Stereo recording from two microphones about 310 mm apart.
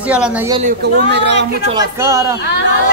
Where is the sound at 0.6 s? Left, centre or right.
Right.